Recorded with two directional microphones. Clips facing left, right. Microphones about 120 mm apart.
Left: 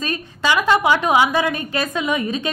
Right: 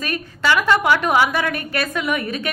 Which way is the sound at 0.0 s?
20° left (ahead or behind).